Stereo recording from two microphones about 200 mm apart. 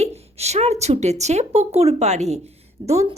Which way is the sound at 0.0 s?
30° right (ahead or behind).